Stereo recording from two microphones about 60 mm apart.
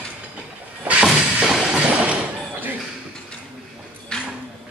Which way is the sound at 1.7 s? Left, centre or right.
Centre.